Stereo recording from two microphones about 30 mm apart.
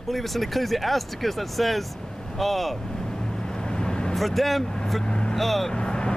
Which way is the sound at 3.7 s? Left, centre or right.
Left.